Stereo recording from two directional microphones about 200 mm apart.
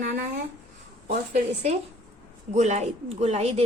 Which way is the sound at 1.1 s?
35° right (ahead or behind).